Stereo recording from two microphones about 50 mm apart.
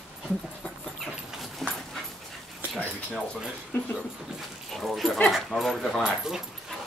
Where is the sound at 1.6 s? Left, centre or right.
Centre.